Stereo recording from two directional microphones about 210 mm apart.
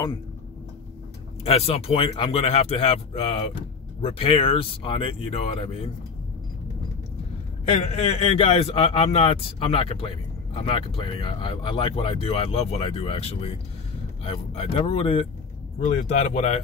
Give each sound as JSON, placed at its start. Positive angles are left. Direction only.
{"t": 1.4, "sound": "speech", "side_deg": 30}
{"t": 7.6, "sound": "speech", "side_deg": 30}
{"t": 15.8, "sound": "speech", "side_deg": 35}